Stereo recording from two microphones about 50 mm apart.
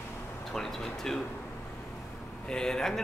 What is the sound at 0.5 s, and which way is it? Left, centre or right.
Speech, centre.